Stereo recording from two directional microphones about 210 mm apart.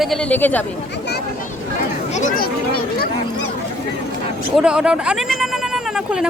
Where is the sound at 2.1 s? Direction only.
40° left (ahead or behind).